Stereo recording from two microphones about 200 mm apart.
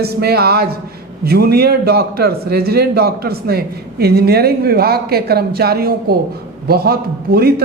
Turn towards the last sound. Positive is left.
turn(degrees=-50)  # may be behind; listen again after turning